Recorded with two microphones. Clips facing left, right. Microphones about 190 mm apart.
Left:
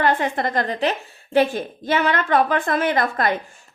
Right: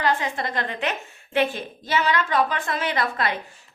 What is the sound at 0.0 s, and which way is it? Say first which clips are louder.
A woman's voice: left 4 dB; 55° left (ahead or behind).